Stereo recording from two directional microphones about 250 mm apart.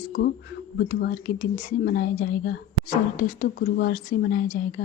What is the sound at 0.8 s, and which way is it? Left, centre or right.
A woman's voice, left.